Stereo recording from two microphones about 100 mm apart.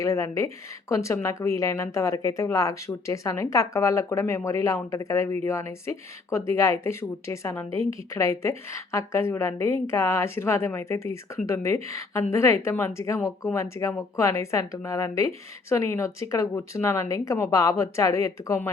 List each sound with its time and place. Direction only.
0.0 s a woman's voice: 30° left (ahead or behind)